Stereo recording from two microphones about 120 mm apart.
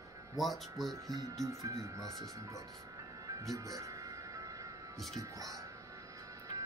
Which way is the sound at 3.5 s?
30° right (ahead or behind).